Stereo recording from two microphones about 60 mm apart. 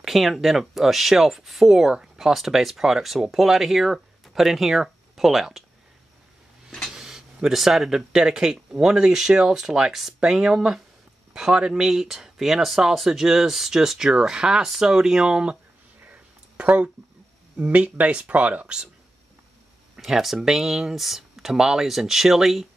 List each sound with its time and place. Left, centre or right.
0.0 s speech: centre
6.9 s a sound: centre
7.4 s speech: centre
16.0 s a sound: right
17.6 s speech: right
20.0 s speech: centre